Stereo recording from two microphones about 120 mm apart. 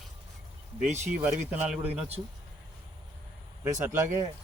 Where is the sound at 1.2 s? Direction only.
15° right (ahead or behind).